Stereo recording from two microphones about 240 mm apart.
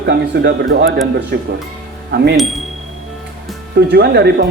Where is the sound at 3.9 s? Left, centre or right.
Right.